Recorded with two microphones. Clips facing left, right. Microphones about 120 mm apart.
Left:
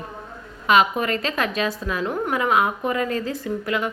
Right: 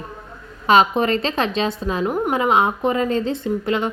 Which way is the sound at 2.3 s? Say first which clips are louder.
Right 2 dB; 25° right (ahead or behind).